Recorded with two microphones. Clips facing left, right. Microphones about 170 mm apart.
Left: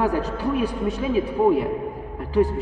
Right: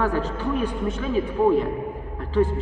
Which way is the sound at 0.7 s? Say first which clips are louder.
Left 2 dB; 35° left (ahead or behind).